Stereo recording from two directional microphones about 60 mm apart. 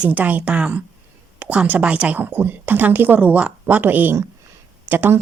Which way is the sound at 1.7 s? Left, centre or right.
Right.